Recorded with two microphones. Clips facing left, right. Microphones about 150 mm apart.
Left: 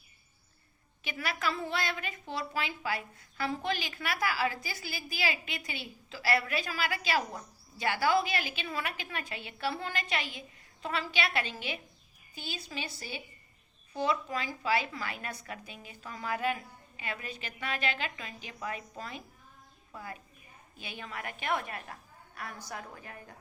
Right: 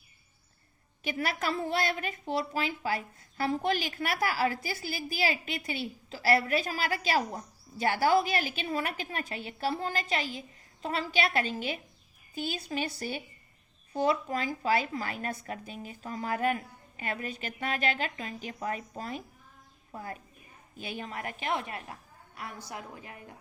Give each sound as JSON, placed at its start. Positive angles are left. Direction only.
{"t": 1.0, "sound": "a woman's voice", "side_deg": -45}